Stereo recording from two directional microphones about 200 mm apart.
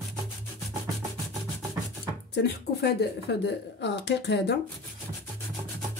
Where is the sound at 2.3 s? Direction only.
55° left (ahead or behind).